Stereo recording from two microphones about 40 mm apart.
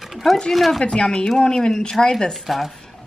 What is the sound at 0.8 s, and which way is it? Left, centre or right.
A woman's voice, centre.